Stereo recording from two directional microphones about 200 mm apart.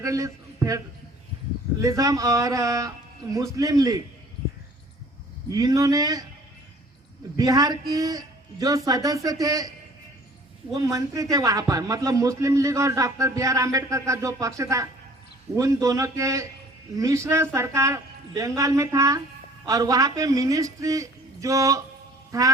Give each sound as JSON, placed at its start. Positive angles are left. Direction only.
{"t": 0.0, "sound": "a man's voice", "side_deg": -15}
{"t": 1.8, "sound": "a man's voice", "side_deg": -15}
{"t": 5.5, "sound": "speech", "side_deg": -20}
{"t": 7.3, "sound": "a man's voice", "side_deg": -15}
{"t": 10.8, "sound": "a man's voice", "side_deg": -15}